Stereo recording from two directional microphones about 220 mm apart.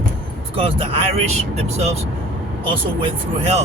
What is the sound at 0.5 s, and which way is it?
Speech, 25° right (ahead or behind).